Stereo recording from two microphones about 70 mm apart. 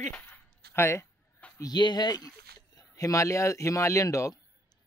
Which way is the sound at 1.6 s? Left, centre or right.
Left.